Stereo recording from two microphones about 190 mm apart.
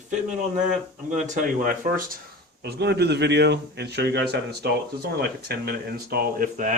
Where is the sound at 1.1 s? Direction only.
45° right (ahead or behind).